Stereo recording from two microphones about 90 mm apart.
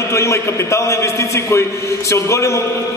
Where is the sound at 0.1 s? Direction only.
35° left (ahead or behind).